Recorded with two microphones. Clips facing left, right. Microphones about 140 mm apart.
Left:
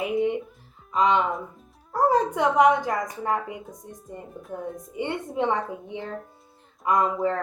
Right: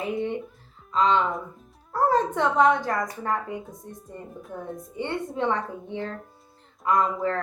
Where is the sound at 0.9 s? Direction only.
15° left (ahead or behind).